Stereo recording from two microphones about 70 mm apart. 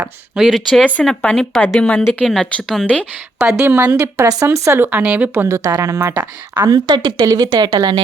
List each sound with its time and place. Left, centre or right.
0.3 s speech: centre
0.8 s speech: centre
2.8 s speech: centre
3.8 s a woman's voice: right
4.8 s speech: right
5.5 s speech: right
6.1 s speech: right
6.7 s speech: right